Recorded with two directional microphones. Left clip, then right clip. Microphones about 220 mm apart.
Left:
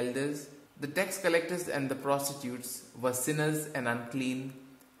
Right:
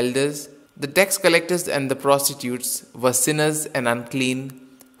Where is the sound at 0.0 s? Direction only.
40° right (ahead or behind).